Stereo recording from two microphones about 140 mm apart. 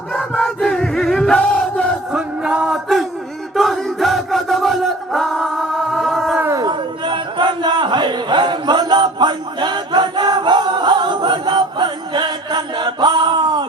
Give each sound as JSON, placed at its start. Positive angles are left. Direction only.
{"t": 0.1, "sound": "chant", "side_deg": 5}
{"t": 2.1, "sound": "music", "side_deg": -5}
{"t": 3.5, "sound": "chant", "side_deg": 0}
{"t": 6.4, "sound": "a sound", "side_deg": -25}